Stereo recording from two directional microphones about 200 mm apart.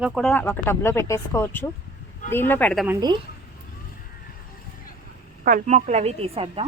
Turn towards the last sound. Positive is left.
turn(degrees=-30)  # may be behind; listen again after turning